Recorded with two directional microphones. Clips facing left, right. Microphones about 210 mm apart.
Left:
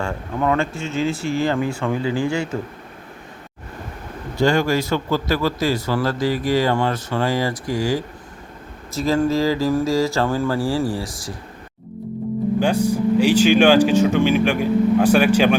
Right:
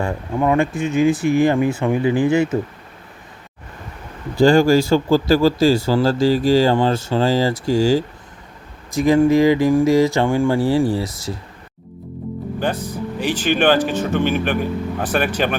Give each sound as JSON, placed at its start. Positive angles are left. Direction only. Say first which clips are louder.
{"t": 0.0, "sound": "speech", "louder": "right 3 dB", "side_deg": -15}
{"t": 4.4, "sound": "speech", "louder": "right 6 dB", "side_deg": -30}
{"t": 9.0, "sound": "speech", "louder": "right 5 dB", "side_deg": -15}
{"t": 12.5, "sound": "speech", "louder": "left 4 dB", "side_deg": 10}